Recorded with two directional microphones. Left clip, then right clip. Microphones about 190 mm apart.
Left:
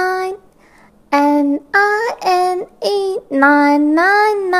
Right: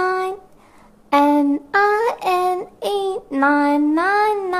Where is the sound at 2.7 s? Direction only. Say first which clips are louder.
Left 4 dB; 25° left (ahead or behind).